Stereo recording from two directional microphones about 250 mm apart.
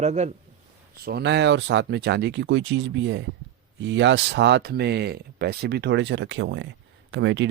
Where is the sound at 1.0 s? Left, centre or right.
Right.